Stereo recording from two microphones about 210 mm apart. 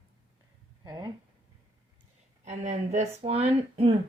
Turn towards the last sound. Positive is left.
turn(degrees=-25)  # may be behind; listen again after turning